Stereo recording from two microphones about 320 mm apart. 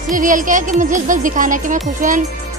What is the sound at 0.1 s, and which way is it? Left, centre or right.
Music, right.